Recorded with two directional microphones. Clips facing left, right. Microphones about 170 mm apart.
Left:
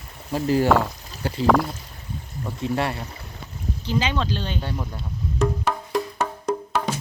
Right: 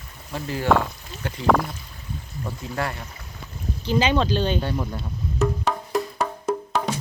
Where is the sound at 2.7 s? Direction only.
30° left (ahead or behind).